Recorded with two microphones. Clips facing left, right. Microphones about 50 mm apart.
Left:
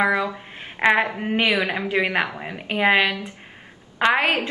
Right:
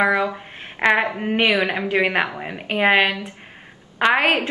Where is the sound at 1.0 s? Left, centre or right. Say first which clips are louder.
Right 2 dB; right.